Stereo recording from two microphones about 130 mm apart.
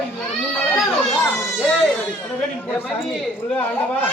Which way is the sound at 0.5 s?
Centre (ahead or behind).